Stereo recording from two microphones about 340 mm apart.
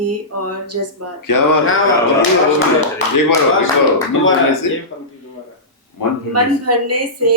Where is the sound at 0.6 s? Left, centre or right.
Right.